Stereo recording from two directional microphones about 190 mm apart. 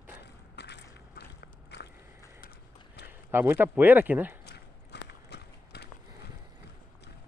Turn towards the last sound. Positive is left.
turn(degrees=60)  # may be behind; listen again after turning